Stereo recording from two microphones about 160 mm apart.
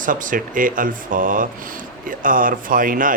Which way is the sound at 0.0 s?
55° right (ahead or behind).